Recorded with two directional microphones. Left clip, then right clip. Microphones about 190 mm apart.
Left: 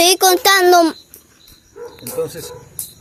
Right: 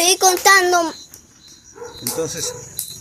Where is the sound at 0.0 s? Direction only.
65° left (ahead or behind).